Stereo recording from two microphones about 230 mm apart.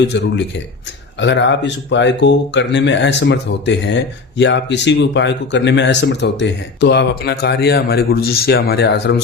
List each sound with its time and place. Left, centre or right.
0.0 s speech: left